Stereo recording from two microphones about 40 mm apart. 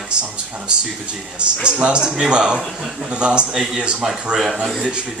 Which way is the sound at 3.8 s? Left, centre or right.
Right.